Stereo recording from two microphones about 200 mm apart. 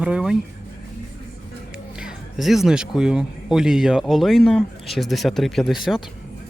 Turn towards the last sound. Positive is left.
turn(degrees=0)  # may be behind; listen again after turning